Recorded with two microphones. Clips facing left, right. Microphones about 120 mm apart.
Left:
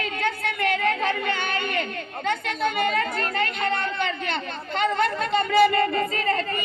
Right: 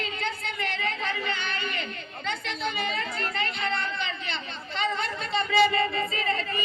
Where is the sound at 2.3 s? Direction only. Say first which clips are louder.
Left 6 dB; 50° left (ahead or behind).